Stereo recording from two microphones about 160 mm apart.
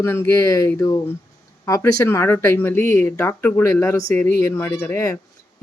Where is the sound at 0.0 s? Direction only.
15° left (ahead or behind).